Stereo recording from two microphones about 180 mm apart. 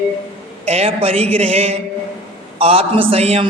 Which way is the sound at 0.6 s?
35° right (ahead or behind).